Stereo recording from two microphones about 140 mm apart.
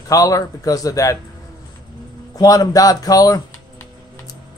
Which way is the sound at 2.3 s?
25° left (ahead or behind).